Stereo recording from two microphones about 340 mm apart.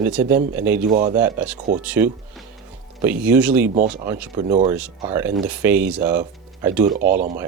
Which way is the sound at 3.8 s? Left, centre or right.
Right.